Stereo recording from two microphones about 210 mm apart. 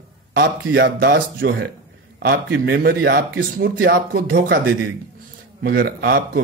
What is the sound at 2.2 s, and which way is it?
Speech, 45° right (ahead or behind).